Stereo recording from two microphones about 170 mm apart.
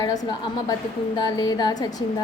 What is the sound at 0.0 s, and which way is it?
A woman's voice, 20° left (ahead or behind).